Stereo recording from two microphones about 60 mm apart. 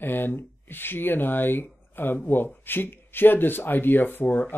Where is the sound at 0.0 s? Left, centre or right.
Left.